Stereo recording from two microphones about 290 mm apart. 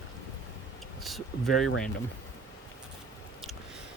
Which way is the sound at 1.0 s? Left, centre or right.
Centre.